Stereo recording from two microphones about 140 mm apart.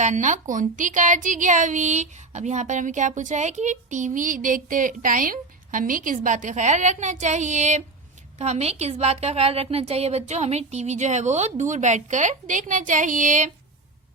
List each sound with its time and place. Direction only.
0.0 s a woman's voice: 60° right (ahead or behind)